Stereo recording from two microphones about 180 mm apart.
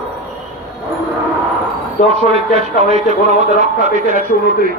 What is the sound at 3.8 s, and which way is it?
Speech, 50° right (ahead or behind).